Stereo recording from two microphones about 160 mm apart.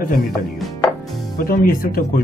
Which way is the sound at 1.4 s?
65° left (ahead or behind).